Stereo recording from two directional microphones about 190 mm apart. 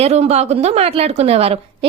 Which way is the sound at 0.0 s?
35° right (ahead or behind).